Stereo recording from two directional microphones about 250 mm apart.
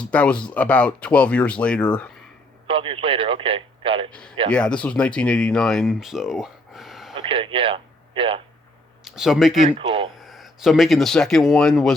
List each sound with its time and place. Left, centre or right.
0.0 s speech: centre
2.6 s speech: right
4.1 s speech: centre
7.1 s speech: centre
9.0 s speech: centre
9.7 s speech: centre
10.2 s speech: centre